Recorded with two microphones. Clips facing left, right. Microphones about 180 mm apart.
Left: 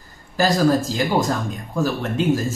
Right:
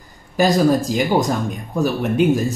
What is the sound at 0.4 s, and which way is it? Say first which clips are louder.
Speech: right 2 dB; 15° right (ahead or behind).